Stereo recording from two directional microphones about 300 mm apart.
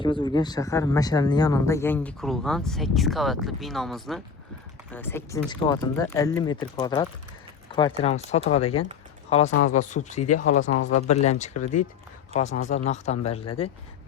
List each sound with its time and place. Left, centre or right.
0.0 s speech: centre
9.5 s speech: left
9.7 s speech: left
10.6 s speech: left
10.9 s speech: left